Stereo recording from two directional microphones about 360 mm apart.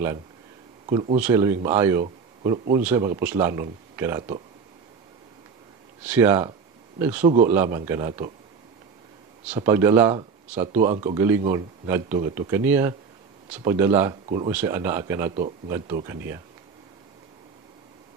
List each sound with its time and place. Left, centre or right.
0.8 s speech: centre
1.2 s speech: centre
6.0 s speech: centre
7.2 s a man's voice: centre
7.4 s speech: centre
9.5 s speech: centre